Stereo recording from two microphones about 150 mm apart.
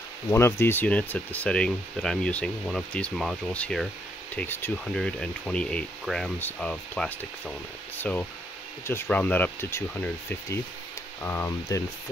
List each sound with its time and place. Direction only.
0.3 s speech: 20° left (ahead or behind)